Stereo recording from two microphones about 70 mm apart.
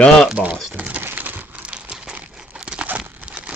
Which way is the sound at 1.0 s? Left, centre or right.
Right.